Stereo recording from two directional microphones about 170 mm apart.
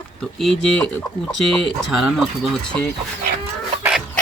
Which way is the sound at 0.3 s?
5° left (ahead or behind).